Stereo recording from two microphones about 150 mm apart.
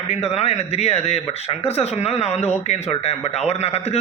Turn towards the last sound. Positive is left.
turn(degrees=45)  # may be behind; listen again after turning